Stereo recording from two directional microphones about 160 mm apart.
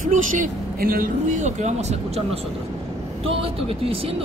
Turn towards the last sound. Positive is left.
turn(degrees=-35)  # may be behind; listen again after turning